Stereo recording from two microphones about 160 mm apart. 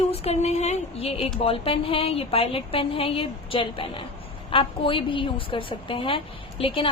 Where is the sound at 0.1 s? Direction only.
40° left (ahead or behind).